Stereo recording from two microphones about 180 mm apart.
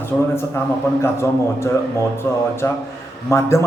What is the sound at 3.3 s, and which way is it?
Speech, 15° left (ahead or behind).